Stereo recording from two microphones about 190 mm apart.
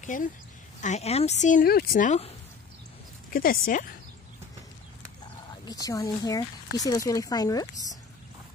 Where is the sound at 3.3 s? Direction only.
50° left (ahead or behind).